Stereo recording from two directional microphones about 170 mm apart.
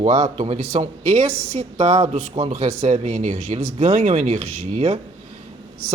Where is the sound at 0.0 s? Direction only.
45° right (ahead or behind).